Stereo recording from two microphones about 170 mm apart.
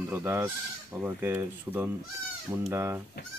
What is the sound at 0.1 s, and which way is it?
Speech, 15° right (ahead or behind).